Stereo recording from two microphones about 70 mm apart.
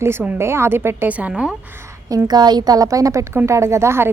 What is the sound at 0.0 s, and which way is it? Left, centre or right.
A woman's voice, right.